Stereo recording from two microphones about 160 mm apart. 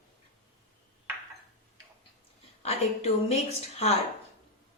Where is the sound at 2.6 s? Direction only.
40° left (ahead or behind).